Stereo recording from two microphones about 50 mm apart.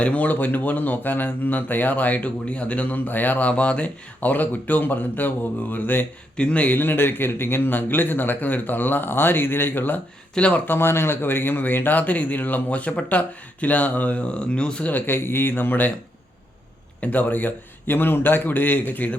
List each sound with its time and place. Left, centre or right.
0.0 s speech: left
6.3 s a man's voice: left
6.7 s speech: left
10.3 s a man's voice: left
10.7 s speech: left
14.8 s speech: left
17.0 s speech: left